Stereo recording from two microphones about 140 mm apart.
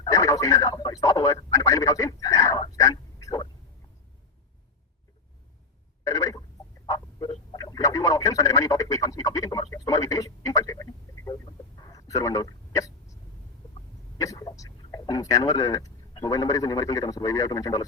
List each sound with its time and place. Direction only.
0.0 s speech: 25° left (ahead or behind)
6.1 s a sound: 25° left (ahead or behind)
6.8 s speech: 30° left (ahead or behind)
11.8 s hiccup: 25° left (ahead or behind)
14.2 s speech: 25° left (ahead or behind)